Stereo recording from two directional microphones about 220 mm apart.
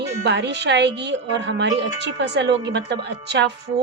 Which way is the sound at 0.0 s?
50° right (ahead or behind).